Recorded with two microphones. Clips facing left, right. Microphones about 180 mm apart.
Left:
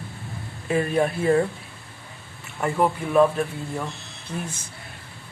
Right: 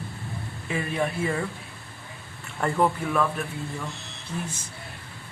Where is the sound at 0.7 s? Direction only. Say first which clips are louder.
Left 6 dB; 40° left (ahead or behind).